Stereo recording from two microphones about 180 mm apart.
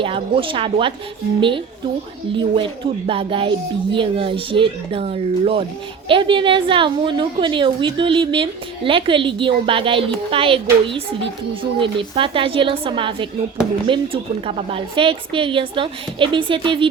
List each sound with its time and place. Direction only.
0.0 s a woman's voice: 30° right (ahead or behind)